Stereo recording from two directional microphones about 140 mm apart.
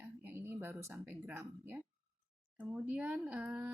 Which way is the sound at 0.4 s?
15° right (ahead or behind).